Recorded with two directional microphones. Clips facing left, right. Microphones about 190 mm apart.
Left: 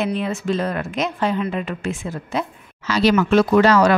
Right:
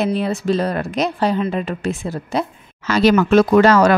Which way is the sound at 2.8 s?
50° right (ahead or behind).